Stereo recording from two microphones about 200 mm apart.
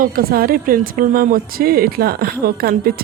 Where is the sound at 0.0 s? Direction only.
45° right (ahead or behind).